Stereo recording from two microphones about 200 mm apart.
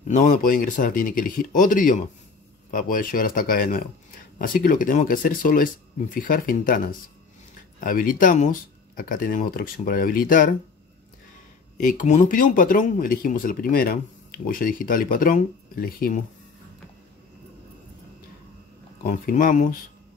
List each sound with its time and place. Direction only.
0.1 s speech: 45° left (ahead or behind)
11.8 s speech: 40° left (ahead or behind)
19.0 s speech: 40° left (ahead or behind)